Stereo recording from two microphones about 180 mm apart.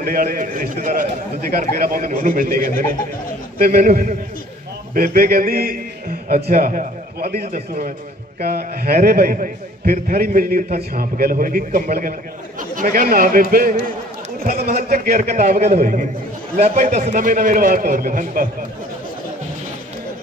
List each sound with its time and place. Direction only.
0.0 s a man's voice: 50° right (ahead or behind)